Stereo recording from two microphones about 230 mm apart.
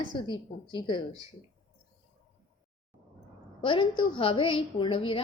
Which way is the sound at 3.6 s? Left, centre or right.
Left.